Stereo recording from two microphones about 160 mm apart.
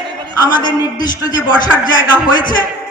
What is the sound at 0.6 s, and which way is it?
Speech, 25° left (ahead or behind).